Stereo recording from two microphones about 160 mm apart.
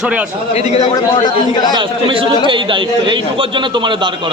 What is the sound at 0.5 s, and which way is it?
Speech, 40° left (ahead or behind).